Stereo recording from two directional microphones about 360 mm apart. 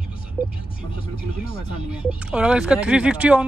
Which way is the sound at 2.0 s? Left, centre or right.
Centre.